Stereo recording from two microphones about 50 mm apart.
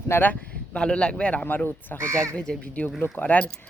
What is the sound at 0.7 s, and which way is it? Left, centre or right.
Speech, centre.